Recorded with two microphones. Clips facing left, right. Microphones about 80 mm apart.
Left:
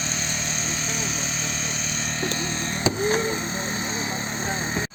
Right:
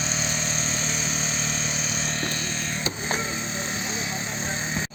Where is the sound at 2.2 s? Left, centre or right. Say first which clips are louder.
Left 3 dB; left.